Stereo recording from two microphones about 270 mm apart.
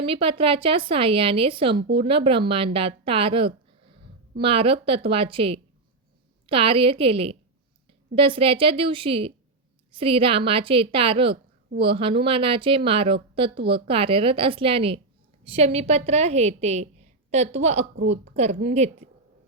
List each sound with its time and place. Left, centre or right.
0.0 s a woman's voice: centre